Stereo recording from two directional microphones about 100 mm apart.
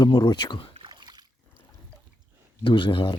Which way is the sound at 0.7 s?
55° right (ahead or behind).